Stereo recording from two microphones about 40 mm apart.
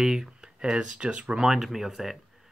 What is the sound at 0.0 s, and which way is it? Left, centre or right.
Speech, centre.